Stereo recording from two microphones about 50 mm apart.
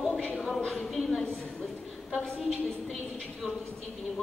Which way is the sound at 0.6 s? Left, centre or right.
Centre.